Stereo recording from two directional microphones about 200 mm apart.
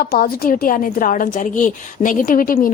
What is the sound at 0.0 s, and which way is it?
A woman's voice, 45° left (ahead or behind).